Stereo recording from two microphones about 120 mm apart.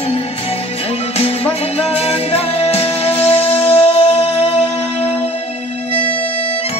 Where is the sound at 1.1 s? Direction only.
55° left (ahead or behind).